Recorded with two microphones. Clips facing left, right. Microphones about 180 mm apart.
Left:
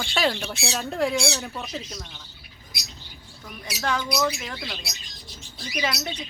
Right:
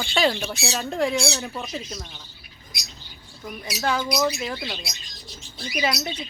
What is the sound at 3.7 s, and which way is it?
Speech, 10° right (ahead or behind).